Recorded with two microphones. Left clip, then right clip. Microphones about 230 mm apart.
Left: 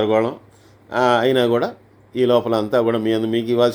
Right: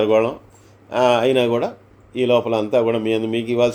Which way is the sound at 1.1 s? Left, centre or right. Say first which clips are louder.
Even; centre.